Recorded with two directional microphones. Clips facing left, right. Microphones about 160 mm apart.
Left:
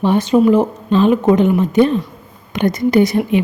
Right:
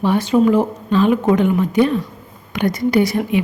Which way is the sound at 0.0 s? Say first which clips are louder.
Left 2 dB; 20° left (ahead or behind).